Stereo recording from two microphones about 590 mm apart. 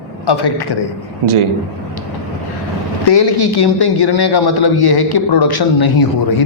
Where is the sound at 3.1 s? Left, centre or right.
Left.